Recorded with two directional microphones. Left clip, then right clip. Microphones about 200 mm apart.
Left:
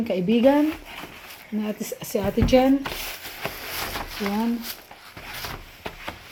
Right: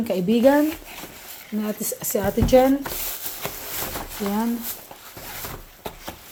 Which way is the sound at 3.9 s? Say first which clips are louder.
Right 3 dB; 5° right (ahead or behind).